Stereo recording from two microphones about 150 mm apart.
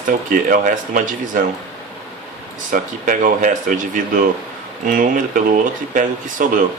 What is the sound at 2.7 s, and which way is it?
Speech, 65° right (ahead or behind).